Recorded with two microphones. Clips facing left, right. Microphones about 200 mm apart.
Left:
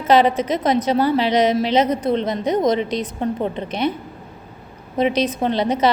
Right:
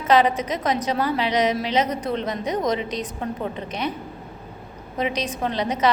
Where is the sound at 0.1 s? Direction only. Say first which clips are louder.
Left 3 dB; 30° left (ahead or behind).